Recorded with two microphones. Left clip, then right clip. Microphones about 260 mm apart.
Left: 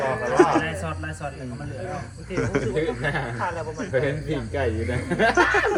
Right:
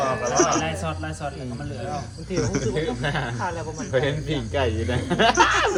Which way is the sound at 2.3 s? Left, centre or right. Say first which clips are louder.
Left 1 dB; centre.